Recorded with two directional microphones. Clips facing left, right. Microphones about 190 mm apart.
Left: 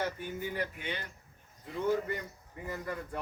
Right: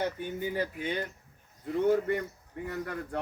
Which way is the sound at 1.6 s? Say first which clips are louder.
Right 5 dB; 60° right (ahead or behind).